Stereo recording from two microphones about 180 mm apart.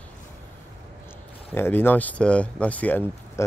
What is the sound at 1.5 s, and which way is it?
Speech, 10° left (ahead or behind).